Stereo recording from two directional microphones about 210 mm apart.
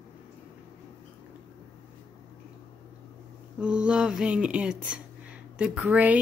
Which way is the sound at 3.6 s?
5° right (ahead or behind).